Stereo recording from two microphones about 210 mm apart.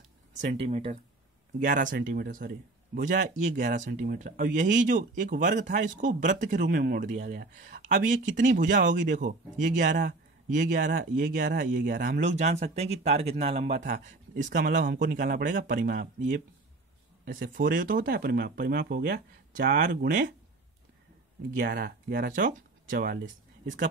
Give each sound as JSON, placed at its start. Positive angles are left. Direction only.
{"t": 0.4, "sound": "speech", "side_deg": -35}
{"t": 1.9, "sound": "speech", "side_deg": -55}
{"t": 9.8, "sound": "speech", "side_deg": -50}
{"t": 10.5, "sound": "speech", "side_deg": -40}
{"t": 17.6, "sound": "speech", "side_deg": -40}
{"t": 21.5, "sound": "speech", "side_deg": -50}